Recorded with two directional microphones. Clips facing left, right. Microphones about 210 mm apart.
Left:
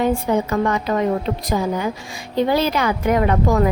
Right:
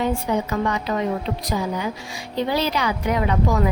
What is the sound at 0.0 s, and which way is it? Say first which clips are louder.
A woman's voice: left 4 dB; 50° left (ahead or behind).